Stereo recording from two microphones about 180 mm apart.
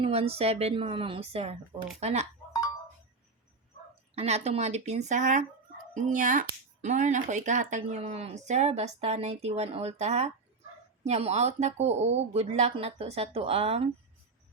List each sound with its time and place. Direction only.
0.0 s speech: 35° right (ahead or behind)
4.1 s speech: 35° right (ahead or behind)